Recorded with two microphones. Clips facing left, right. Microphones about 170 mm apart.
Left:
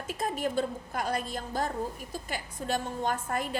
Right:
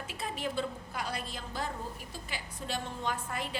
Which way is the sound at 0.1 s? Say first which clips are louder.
Left 7 dB; 45° left (ahead or behind).